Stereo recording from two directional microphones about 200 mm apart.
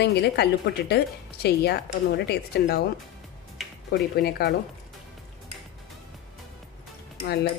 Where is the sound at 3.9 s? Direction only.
50° left (ahead or behind).